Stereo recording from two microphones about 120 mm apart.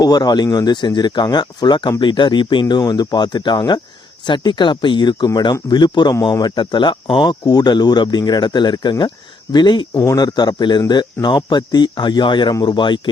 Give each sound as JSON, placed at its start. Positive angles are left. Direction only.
{"t": 0.0, "sound": "speech", "side_deg": 35}